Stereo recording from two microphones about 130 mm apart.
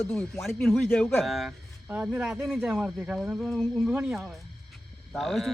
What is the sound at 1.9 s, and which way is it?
Speech, 15° right (ahead or behind).